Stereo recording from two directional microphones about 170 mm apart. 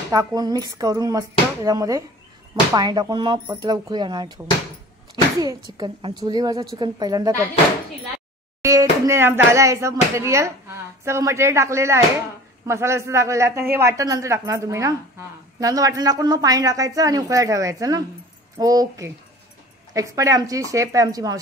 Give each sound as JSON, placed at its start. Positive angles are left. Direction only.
{"t": 0.1, "sound": "speech", "side_deg": -20}
{"t": 9.0, "sound": "speech", "side_deg": -15}